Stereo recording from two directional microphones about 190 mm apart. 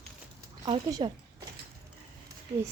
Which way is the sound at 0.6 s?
25° right (ahead or behind).